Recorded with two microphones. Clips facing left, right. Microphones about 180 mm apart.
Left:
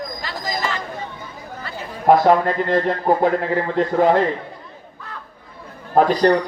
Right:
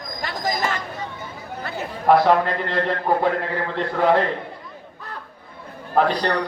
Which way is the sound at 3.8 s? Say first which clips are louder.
Left 3 dB; 45° left (ahead or behind).